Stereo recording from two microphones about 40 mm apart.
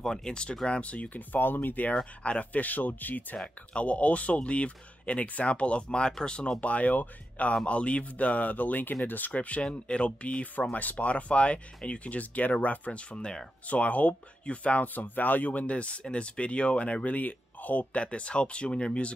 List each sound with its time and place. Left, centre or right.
0.0 s speech: centre
0.7 s speech: left
1.1 s speech: left
2.2 s speech: left
3.7 s speech: left
6.6 s speech: left
9.3 s speech: left
10.7 s speech: left
13.1 s speech: left
13.7 s speech: left
17.9 s speech: left
18.7 s speech: centre